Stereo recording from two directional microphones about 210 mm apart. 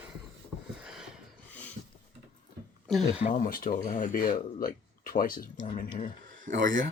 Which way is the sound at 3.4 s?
40° left (ahead or behind).